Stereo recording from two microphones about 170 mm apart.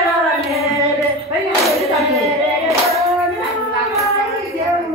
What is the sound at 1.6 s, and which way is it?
Clapping, centre (ahead or behind).